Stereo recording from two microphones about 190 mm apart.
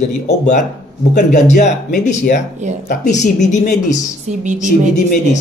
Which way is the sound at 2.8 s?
40° left (ahead or behind).